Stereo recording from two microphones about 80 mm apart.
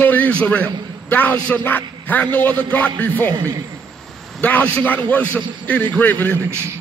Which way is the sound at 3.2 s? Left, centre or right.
Right.